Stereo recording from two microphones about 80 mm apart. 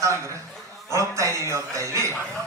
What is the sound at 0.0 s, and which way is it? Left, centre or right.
A man's voice, right.